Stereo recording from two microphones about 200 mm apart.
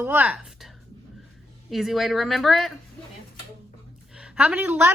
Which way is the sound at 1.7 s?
Centre (ahead or behind).